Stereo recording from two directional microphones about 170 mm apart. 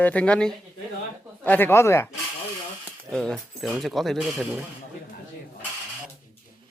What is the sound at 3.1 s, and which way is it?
Speech, 5° left (ahead or behind).